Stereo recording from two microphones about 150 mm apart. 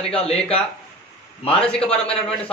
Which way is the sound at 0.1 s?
40° left (ahead or behind).